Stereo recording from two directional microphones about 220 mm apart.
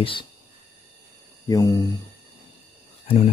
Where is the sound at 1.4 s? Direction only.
15° left (ahead or behind).